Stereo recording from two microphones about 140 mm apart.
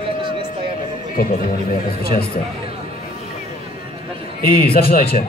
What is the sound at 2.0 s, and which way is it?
Speech, 90° left.